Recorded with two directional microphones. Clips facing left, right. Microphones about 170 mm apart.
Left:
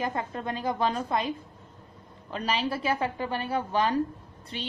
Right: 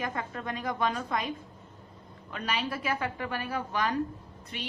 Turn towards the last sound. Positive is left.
turn(degrees=30)  # may be behind; listen again after turning